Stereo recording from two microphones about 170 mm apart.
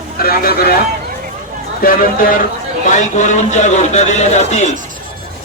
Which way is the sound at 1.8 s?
60° left (ahead or behind).